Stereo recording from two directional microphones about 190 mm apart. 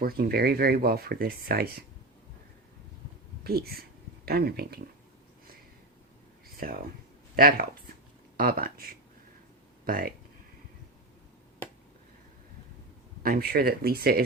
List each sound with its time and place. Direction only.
0.0 s speech: 55° right (ahead or behind)
3.4 s speech: 55° right (ahead or behind)
6.6 s speech: 50° right (ahead or behind)
13.2 s speech: 50° right (ahead or behind)